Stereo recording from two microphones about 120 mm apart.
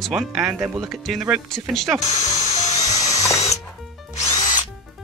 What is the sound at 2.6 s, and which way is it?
Drill, 30° left (ahead or behind).